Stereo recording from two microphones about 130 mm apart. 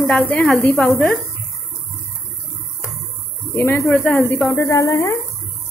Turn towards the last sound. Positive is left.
turn(degrees=25)  # may be behind; listen again after turning